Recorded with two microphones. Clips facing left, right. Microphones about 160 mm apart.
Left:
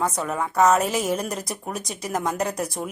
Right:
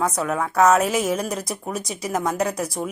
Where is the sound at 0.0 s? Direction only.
Centre (ahead or behind).